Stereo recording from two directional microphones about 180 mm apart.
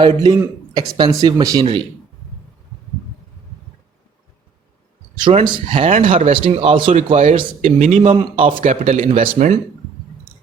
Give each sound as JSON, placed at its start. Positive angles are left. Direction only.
{"t": 0.0, "sound": "speech", "side_deg": -25}
{"t": 5.1, "sound": "speech", "side_deg": -25}
{"t": 5.8, "sound": "speech", "side_deg": -45}
{"t": 6.3, "sound": "speech", "side_deg": -30}
{"t": 8.6, "sound": "speech", "side_deg": -45}